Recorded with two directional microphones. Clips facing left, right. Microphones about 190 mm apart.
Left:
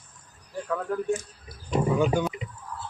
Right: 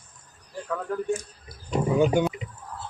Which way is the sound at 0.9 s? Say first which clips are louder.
Even; 5° left (ahead or behind).